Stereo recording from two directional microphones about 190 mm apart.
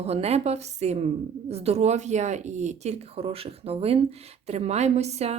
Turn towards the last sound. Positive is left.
turn(degrees=-35)  # may be behind; listen again after turning